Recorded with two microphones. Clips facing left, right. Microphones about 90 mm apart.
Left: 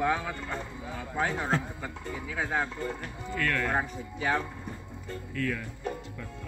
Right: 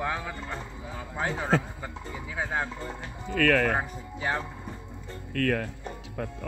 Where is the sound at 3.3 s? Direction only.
90° right.